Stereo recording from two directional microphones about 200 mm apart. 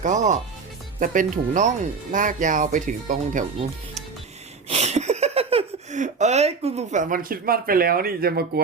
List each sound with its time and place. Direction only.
0.0 s speech: 35° right (ahead or behind)
4.7 s speech: 35° right (ahead or behind); by 8.6 s 50° right (ahead or behind)